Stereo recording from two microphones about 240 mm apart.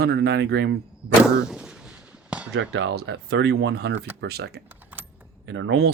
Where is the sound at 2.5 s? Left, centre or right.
Right.